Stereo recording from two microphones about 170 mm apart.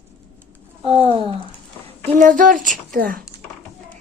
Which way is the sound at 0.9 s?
30° right (ahead or behind).